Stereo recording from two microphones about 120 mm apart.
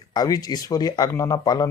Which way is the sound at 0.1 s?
35° left (ahead or behind).